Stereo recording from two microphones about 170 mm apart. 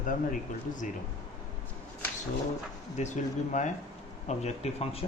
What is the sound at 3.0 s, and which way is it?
Speech, 45° left (ahead or behind).